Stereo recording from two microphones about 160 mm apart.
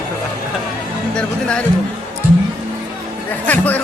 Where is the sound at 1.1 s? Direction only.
5° left (ahead or behind).